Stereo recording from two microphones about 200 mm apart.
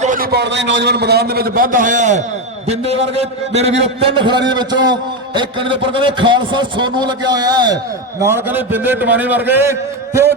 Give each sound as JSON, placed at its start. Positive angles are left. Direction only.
{"t": 0.0, "sound": "a man's voice", "side_deg": -45}